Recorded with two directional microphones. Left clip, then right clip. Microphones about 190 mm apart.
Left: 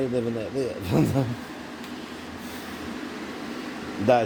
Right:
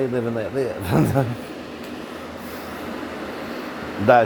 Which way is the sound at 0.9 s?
15° right (ahead or behind).